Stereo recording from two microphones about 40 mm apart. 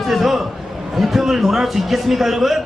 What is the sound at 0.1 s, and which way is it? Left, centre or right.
A man's voice, centre.